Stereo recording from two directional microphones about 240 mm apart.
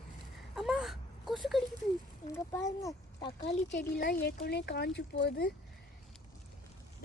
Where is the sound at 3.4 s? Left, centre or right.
Left.